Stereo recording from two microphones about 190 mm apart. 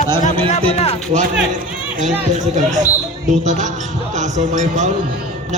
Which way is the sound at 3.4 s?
40° right (ahead or behind).